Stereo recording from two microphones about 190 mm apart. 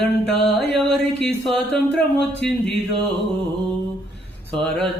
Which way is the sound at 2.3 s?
65° left (ahead or behind).